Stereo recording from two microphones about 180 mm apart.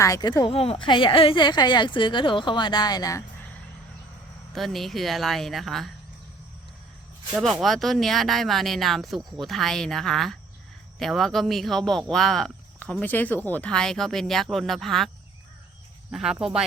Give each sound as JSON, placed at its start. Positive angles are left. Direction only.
{"t": 0.0, "sound": "a woman's voice", "side_deg": 20}
{"t": 4.5, "sound": "speech", "side_deg": 0}
{"t": 7.6, "sound": "speech", "side_deg": 0}
{"t": 16.1, "sound": "speech", "side_deg": -5}